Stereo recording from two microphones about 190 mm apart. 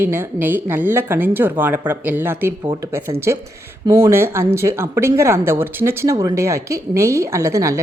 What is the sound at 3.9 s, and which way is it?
A woman's voice, 15° right (ahead or behind).